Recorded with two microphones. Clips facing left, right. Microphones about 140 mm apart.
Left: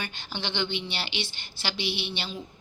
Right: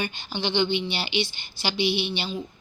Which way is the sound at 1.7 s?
30° left (ahead or behind).